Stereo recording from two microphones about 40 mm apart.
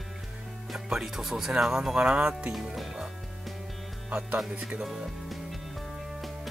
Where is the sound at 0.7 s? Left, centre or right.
Centre.